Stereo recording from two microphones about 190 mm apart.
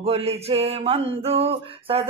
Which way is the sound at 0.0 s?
30° right (ahead or behind).